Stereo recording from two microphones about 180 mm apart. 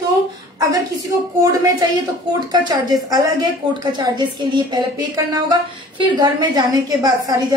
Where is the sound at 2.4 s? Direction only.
25° right (ahead or behind).